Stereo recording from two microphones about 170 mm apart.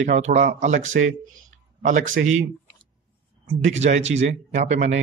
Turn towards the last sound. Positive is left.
turn(degrees=-45)  # may be behind; listen again after turning